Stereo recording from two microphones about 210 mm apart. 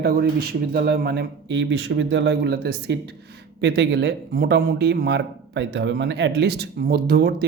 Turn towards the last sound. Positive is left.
turn(degrees=-50)  # may be behind; listen again after turning